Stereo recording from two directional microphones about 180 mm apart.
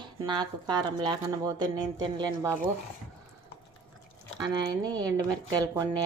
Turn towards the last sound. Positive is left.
turn(degrees=-20)  # may be behind; listen again after turning